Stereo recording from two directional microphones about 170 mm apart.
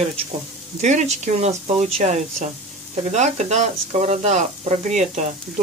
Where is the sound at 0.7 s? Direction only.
45° right (ahead or behind).